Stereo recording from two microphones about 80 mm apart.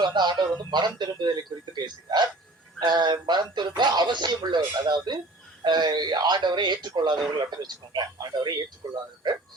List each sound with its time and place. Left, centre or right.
0.0 s speech: right
2.8 s synthetic singing: right
3.5 s speech: right
9.2 s synthetic singing: right